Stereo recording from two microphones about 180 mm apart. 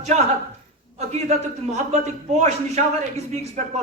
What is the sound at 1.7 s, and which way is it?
A man's voice, 40° right (ahead or behind).